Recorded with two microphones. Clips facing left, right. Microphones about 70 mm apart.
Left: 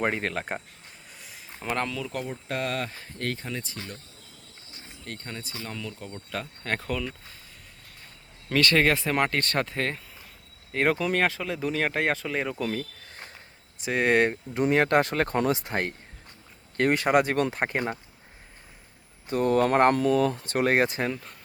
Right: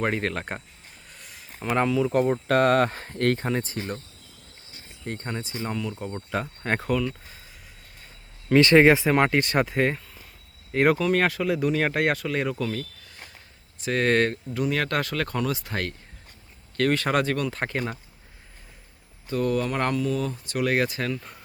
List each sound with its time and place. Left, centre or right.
0.0 s speech: centre
1.2 s a sound: centre
1.7 s speech: centre
2.3 s speech: right
5.0 s speech: right
8.5 s speech: right; by 12.5 s centre
12.5 s speech: centre
13.8 s speech: centre
14.5 s speech: left
19.3 s speech: left
19.5 s speech: left
20.5 s speech: left